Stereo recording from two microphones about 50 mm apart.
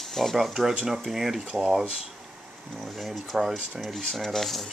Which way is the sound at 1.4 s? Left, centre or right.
Centre.